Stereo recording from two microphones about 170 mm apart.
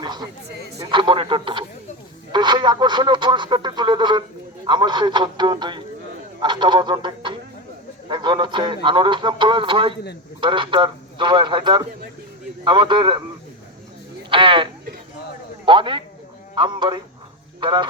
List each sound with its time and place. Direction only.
0.0 s a sound: 25° right (ahead or behind)
0.8 s speech: 30° right (ahead or behind)
14.3 s speech: 30° right (ahead or behind)